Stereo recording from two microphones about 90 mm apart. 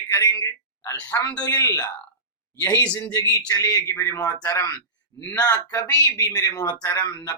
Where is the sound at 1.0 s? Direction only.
45° left (ahead or behind).